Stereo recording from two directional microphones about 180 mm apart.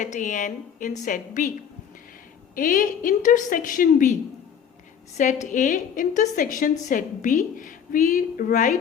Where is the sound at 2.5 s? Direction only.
50° left (ahead or behind).